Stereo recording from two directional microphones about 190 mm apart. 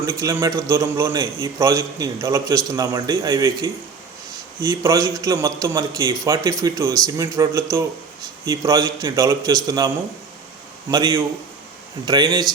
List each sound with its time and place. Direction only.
0.0 s a man's voice: 15° right (ahead or behind)
10.9 s speech: 20° right (ahead or behind)